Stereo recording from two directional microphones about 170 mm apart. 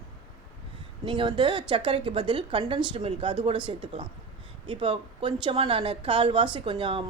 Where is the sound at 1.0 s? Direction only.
30° right (ahead or behind).